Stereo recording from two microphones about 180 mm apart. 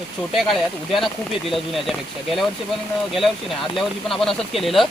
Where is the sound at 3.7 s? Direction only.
Centre (ahead or behind).